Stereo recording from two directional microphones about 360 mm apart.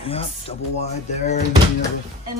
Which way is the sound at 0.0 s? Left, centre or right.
Centre.